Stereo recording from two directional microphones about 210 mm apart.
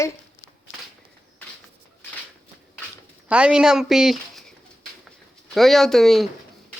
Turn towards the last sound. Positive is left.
turn(degrees=0)  # may be behind; listen again after turning